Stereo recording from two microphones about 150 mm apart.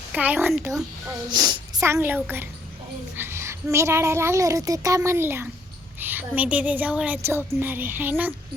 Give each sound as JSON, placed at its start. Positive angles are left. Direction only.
{"t": 0.1, "sound": "a child's voice", "side_deg": -10}
{"t": 1.3, "sound": "a woman's voice", "side_deg": -30}